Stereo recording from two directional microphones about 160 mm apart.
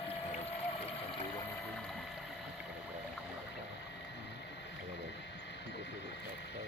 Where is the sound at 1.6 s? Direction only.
5° left (ahead or behind).